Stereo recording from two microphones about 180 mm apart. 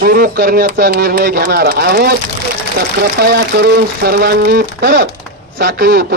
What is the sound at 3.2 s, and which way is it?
A man's voice, 65° right (ahead or behind).